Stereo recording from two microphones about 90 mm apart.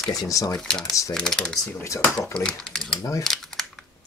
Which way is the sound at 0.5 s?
5° left (ahead or behind).